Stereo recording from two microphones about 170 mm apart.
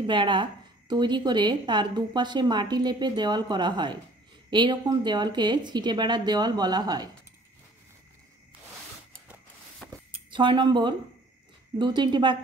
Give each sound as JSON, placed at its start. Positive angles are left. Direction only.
{"t": 0.0, "sound": "speech", "side_deg": -30}
{"t": 9.8, "sound": "a sound", "side_deg": 5}
{"t": 10.3, "sound": "speech", "side_deg": -30}